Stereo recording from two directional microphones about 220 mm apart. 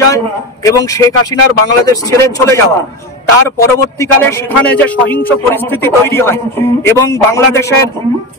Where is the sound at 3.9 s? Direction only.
10° left (ahead or behind).